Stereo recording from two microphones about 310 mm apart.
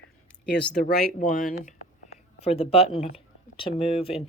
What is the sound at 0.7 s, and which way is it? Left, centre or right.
Speech, left.